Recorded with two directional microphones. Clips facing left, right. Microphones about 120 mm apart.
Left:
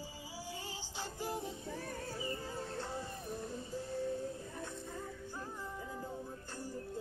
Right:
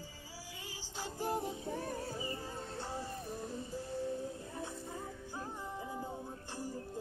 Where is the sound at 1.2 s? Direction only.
45° right (ahead or behind).